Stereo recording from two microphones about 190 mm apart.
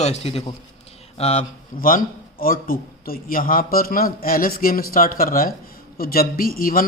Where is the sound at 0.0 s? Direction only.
35° left (ahead or behind).